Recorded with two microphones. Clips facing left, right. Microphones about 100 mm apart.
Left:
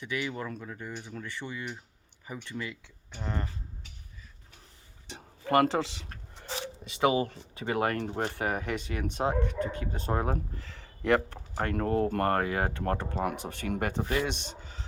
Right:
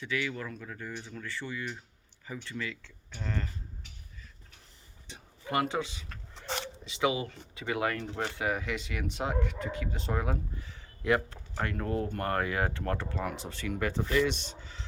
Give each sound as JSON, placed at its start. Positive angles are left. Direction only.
{"t": 0.0, "sound": "speech", "side_deg": 20}
{"t": 5.0, "sound": "a sound", "side_deg": 60}
{"t": 5.6, "sound": "speech", "side_deg": 75}
{"t": 6.4, "sound": "zipper", "side_deg": -70}
{"t": 6.8, "sound": "speech", "side_deg": 55}
{"t": 10.6, "sound": "a sound", "side_deg": 85}
{"t": 11.1, "sound": "speech", "side_deg": 50}
{"t": 13.2, "sound": "speech", "side_deg": 55}